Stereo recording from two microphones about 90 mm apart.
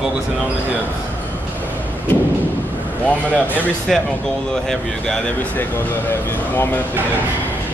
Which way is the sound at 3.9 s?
5° left (ahead or behind).